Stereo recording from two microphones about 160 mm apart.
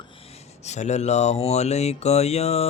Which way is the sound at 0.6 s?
45° left (ahead or behind).